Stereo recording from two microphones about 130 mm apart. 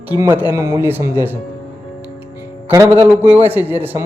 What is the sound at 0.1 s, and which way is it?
A man's voice, 15° right (ahead or behind).